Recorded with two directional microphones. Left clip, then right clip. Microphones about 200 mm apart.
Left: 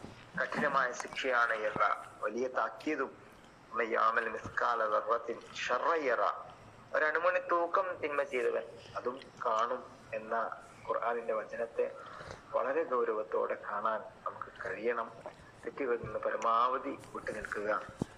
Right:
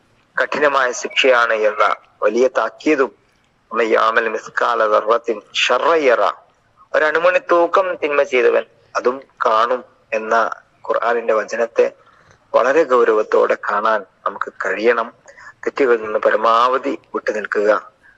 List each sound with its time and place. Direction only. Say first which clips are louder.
0.3 s a man's voice: right 16 dB; 55° right (ahead or behind)